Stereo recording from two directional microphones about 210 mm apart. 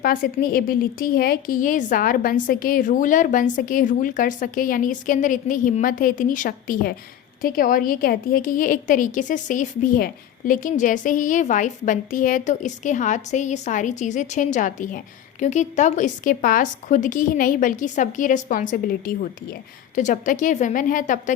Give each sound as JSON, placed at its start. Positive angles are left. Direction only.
{"t": 0.0, "sound": "a woman's voice", "side_deg": 45}